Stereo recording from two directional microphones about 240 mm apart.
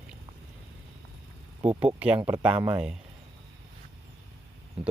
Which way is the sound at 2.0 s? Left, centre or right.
Centre.